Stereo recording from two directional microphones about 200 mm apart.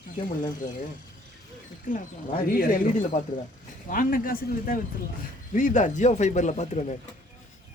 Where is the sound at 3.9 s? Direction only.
45° left (ahead or behind).